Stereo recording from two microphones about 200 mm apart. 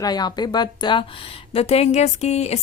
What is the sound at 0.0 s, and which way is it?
A woman's voice, 20° left (ahead or behind).